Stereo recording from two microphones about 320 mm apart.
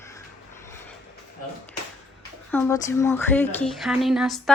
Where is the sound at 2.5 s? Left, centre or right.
Centre.